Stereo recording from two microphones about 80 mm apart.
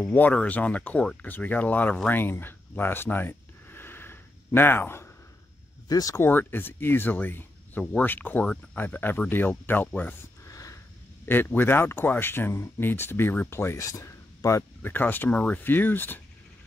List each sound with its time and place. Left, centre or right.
0.0 s speech: centre
2.0 s a sound: left
5.9 s speech: left
6.1 s speech: left
10.4 s a sound: left
11.2 s speech: left
14.8 s speech: left